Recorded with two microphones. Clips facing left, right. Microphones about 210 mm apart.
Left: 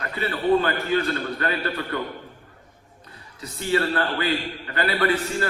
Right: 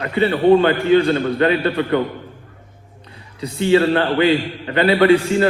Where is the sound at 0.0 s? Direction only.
25° right (ahead or behind).